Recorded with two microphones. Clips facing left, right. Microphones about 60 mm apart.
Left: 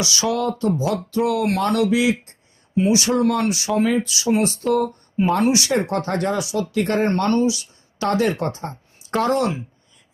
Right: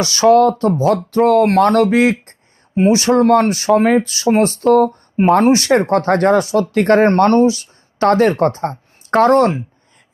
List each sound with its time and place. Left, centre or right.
0.0 s speech: right